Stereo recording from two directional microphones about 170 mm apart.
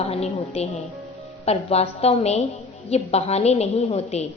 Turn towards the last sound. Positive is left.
turn(degrees=40)  # may be behind; listen again after turning